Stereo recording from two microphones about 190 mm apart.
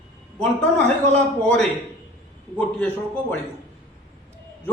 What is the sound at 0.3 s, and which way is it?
A man's voice, 5° left (ahead or behind).